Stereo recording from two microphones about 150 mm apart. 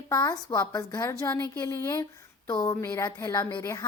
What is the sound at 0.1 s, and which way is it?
A woman's voice, 20° left (ahead or behind).